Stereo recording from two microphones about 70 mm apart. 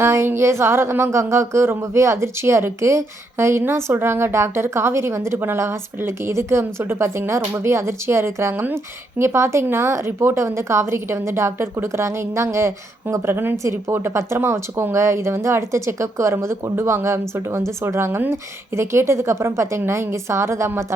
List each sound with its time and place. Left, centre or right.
0.0 s a woman's voice: right